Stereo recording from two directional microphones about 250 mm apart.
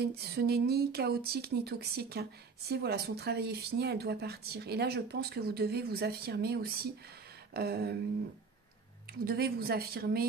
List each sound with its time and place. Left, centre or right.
0.0 s speech: right
9.2 s speech: right